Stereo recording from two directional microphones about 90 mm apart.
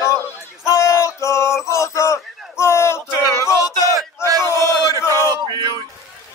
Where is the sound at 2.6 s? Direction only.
30° left (ahead or behind).